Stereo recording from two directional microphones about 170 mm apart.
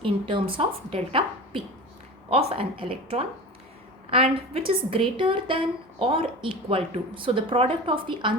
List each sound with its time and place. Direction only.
0.0 s a woman's voice: 30° right (ahead or behind)